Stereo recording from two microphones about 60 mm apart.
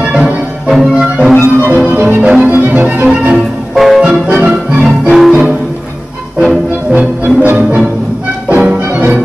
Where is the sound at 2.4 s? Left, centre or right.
Right.